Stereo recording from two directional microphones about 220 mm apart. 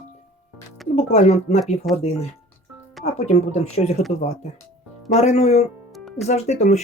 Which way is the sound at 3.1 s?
30° left (ahead or behind).